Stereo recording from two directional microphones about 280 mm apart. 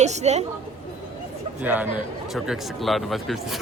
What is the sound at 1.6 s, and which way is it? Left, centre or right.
A man's voice, centre.